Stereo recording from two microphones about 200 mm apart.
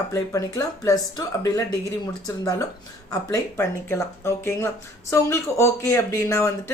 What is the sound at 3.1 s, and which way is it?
Speech, 15° left (ahead or behind).